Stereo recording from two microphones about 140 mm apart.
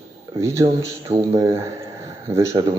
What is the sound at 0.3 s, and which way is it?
Speech, 25° right (ahead or behind).